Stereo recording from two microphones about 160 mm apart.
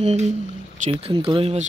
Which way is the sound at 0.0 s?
45° right (ahead or behind).